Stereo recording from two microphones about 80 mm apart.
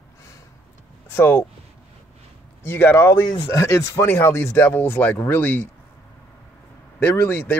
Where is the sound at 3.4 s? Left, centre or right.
Left.